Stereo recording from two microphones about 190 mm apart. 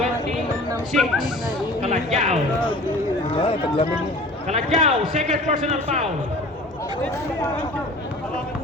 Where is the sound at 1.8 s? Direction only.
40° right (ahead or behind).